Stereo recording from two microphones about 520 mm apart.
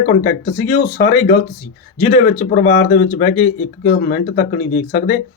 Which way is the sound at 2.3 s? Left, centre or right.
Centre.